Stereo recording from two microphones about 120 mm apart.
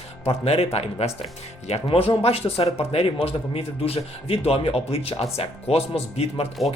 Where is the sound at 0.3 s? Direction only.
55° left (ahead or behind).